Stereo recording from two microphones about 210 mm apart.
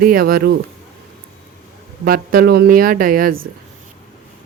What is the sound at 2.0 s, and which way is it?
Speech, 45° right (ahead or behind).